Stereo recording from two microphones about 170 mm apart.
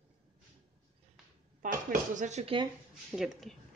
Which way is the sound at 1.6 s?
50° right (ahead or behind).